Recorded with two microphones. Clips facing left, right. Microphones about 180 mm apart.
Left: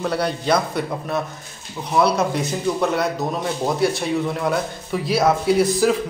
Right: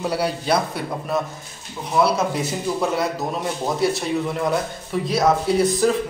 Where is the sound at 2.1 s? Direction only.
5° right (ahead or behind).